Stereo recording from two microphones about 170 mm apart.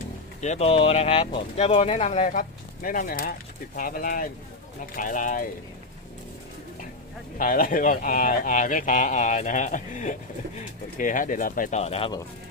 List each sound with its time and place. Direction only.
0.4 s speech: 40° left (ahead or behind)
7.3 s speech: 50° left (ahead or behind); by 12.1 s 35° left (ahead or behind)